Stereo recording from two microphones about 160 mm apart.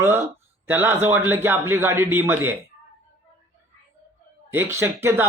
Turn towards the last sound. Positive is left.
turn(degrees=-15)  # may be behind; listen again after turning